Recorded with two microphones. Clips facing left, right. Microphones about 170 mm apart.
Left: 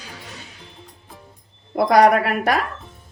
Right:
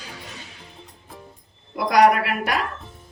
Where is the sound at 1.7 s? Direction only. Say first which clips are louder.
Left 3 dB; 55° left (ahead or behind).